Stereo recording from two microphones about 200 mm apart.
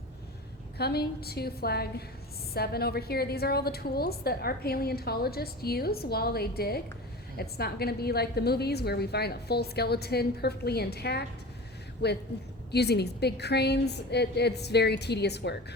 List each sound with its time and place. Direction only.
0.8 s a woman's voice: 55° left (ahead or behind)